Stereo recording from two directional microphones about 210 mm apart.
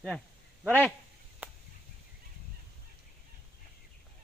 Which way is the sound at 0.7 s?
10° left (ahead or behind).